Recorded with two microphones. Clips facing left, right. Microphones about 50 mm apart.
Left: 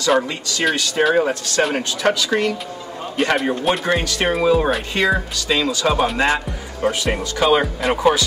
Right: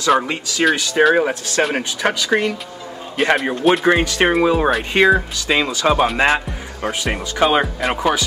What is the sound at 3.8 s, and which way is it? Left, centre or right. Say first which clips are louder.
Speech: right 4 dB; right.